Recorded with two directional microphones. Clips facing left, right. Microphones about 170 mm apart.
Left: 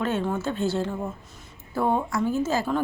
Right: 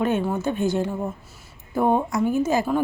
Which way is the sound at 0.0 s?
15° right (ahead or behind).